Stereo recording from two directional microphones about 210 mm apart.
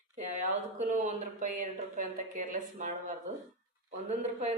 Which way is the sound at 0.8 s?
35° right (ahead or behind).